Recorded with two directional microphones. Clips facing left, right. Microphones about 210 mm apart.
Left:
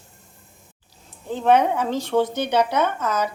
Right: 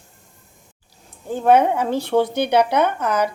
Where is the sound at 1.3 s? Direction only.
10° right (ahead or behind).